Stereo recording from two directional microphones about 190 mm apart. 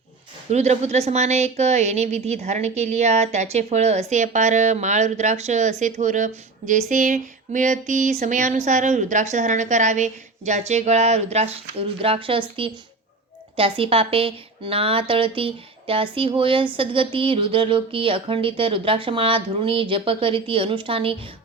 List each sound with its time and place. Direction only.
0.5 s a woman's voice: 35° right (ahead or behind)